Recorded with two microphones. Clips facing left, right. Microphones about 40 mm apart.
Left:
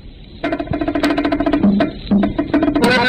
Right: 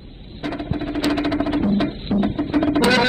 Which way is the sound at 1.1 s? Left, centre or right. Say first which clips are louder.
Left 1 dB; left.